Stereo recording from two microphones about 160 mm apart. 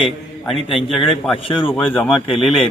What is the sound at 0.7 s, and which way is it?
Speech, 35° left (ahead or behind).